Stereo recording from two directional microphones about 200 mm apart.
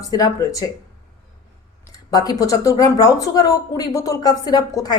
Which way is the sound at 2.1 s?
20° left (ahead or behind).